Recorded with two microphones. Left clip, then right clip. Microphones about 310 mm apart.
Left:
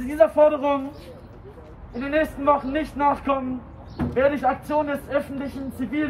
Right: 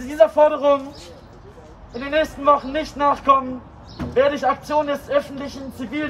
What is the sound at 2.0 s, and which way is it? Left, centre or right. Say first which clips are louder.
A man's voice: right 2 dB; centre.